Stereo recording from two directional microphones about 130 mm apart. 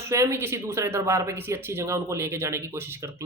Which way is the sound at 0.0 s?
20° right (ahead or behind).